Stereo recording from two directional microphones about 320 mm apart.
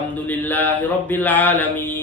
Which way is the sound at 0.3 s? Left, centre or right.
Centre.